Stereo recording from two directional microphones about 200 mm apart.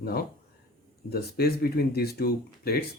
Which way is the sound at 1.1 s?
50° left (ahead or behind).